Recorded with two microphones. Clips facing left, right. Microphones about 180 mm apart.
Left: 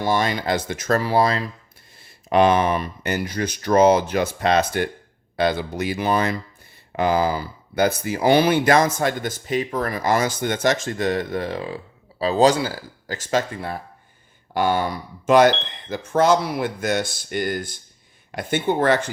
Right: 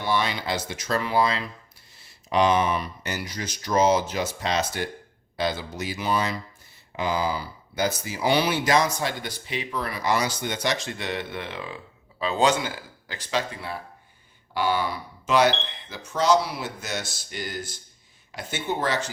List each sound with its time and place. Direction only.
0.0 s speech: 45° left (ahead or behind)
2.0 s speech: 55° left (ahead or behind)